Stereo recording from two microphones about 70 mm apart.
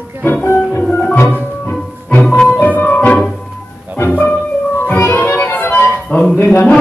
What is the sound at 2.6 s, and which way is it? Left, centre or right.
Music, left.